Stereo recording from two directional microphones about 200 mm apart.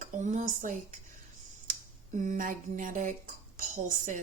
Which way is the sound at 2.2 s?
40° right (ahead or behind).